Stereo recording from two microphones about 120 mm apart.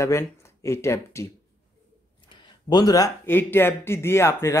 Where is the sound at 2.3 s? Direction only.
40° left (ahead or behind).